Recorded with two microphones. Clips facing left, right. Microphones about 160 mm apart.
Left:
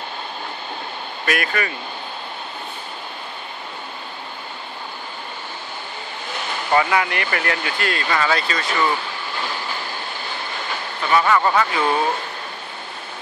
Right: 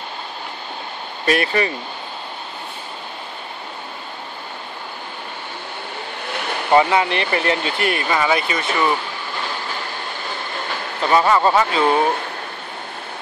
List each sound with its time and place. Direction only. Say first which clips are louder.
1.2 s speech: right 5 dB; 30° right (ahead or behind)
6.7 s speech: right 4 dB; 25° right (ahead or behind)
11.1 s speech: right 2 dB; 25° right (ahead or behind)